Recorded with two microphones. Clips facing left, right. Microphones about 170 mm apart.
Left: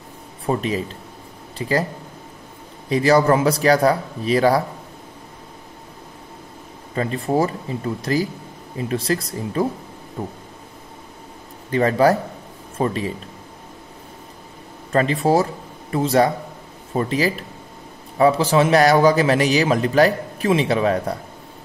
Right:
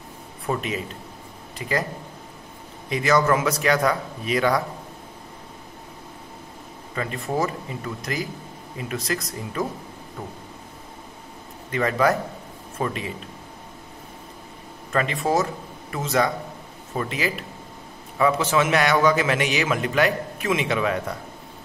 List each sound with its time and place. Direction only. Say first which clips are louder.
0.5 s a man's voice: left 5 dB; 35° left (ahead or behind)
2.9 s a man's voice: left 5 dB; 35° left (ahead or behind)
7.0 s a man's voice: left 5 dB; 30° left (ahead or behind)
11.7 s a man's voice: left 5 dB; 30° left (ahead or behind)
14.9 s a man's voice: left 5 dB; 35° left (ahead or behind)